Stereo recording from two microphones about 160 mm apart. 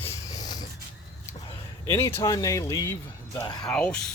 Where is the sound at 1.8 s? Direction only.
20° left (ahead or behind).